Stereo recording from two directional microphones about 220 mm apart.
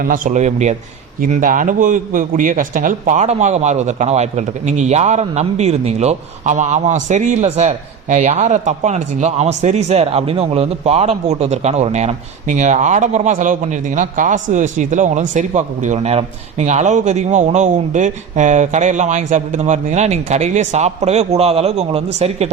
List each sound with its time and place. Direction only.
0.0 s a man's voice: 40° right (ahead or behind)